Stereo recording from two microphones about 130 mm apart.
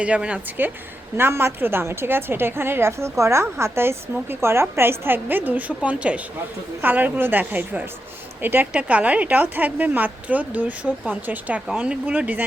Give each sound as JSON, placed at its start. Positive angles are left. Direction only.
{"t": 0.0, "sound": "a woman's voice", "side_deg": -10}